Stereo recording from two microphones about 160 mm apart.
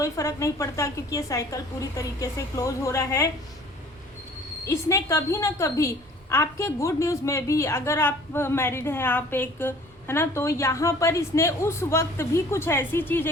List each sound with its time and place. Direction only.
0.0 s a woman's voice: 20° left (ahead or behind)
4.6 s a woman's voice: 20° left (ahead or behind)